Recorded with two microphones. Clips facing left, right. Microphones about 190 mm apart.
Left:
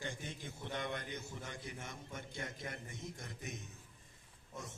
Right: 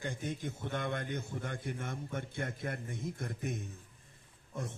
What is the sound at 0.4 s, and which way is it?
A man's voice, 50° right (ahead or behind).